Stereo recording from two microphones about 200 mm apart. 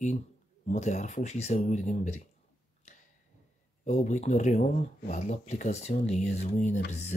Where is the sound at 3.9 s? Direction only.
35° left (ahead or behind).